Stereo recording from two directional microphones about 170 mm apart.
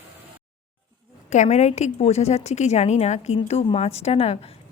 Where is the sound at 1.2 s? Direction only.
45° left (ahead or behind).